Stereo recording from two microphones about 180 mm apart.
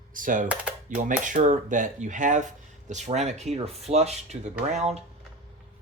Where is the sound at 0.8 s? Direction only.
45° right (ahead or behind).